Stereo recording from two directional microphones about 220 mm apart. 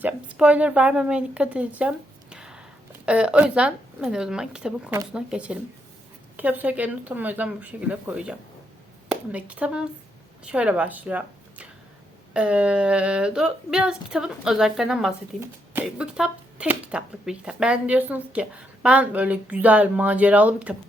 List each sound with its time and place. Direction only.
0.0 s a woman's voice: 5° right (ahead or behind)